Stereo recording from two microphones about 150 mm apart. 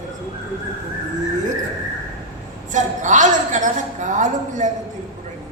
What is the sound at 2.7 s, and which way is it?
A woman's voice, 55° right (ahead or behind).